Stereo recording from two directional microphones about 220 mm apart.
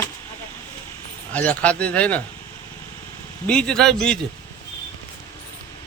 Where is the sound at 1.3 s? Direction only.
5° left (ahead or behind).